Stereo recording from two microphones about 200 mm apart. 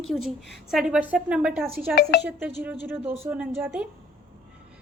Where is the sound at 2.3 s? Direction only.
10° right (ahead or behind).